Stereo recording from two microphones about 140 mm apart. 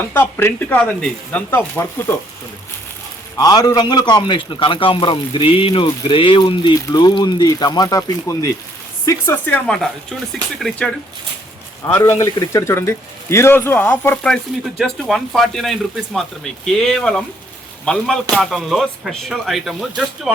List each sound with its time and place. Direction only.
0.0 s speech: 15° left (ahead or behind)
3.3 s a man's voice: 25° left (ahead or behind)
9.6 s speech: 5° left (ahead or behind)
11.9 s speech: 20° left (ahead or behind)
14.8 s speech: centre (ahead or behind)